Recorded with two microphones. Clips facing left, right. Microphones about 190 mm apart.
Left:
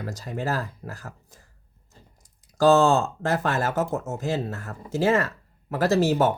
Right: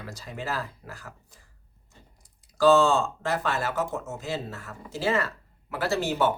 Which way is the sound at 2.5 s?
45° left (ahead or behind).